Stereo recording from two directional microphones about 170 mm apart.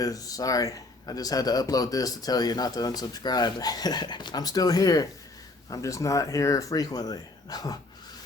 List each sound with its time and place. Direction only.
0.0 s a man's voice: 20° left (ahead or behind)